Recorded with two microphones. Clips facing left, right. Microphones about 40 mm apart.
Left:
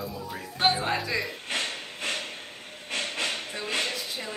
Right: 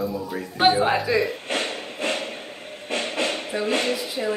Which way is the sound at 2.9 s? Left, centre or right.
Centre.